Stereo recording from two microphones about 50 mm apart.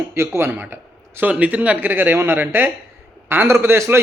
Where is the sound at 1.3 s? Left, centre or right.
Right.